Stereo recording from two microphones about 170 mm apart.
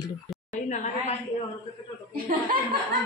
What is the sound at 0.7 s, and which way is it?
Speech, 45° left (ahead or behind).